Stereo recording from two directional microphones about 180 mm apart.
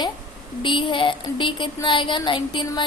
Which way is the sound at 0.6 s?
25° left (ahead or behind).